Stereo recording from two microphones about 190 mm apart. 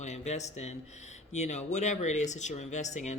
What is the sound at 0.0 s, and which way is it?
Speech, 35° left (ahead or behind).